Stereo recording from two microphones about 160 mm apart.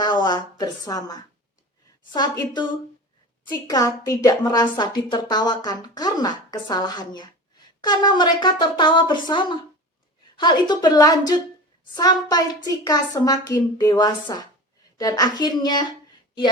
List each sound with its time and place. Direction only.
0.0 s a woman's voice: 30° left (ahead or behind)
3.4 s a woman's voice: 25° left (ahead or behind)